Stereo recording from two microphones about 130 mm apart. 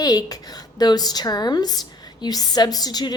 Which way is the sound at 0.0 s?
30° left (ahead or behind).